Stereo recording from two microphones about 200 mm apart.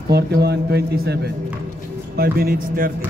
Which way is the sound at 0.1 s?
55° right (ahead or behind).